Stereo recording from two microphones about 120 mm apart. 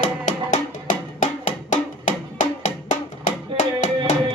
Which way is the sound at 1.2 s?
90° left.